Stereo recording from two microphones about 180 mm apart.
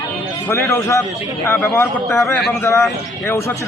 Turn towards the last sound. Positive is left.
turn(degrees=15)  # may be behind; listen again after turning